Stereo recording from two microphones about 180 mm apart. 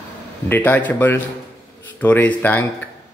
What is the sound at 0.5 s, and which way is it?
Speech, 10° left (ahead or behind).